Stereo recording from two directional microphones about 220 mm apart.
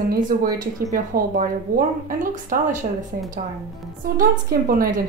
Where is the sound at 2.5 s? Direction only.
40° right (ahead or behind).